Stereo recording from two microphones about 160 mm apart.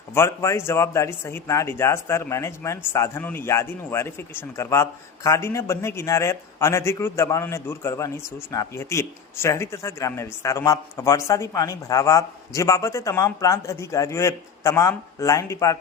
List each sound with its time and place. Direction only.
0.1 s a man's voice: 15° left (ahead or behind)